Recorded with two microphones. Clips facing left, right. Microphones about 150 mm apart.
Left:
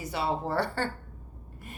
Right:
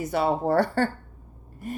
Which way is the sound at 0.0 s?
50° right (ahead or behind).